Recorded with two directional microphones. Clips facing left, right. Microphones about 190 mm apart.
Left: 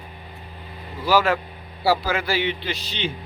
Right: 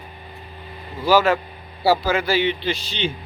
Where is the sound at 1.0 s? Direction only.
25° right (ahead or behind).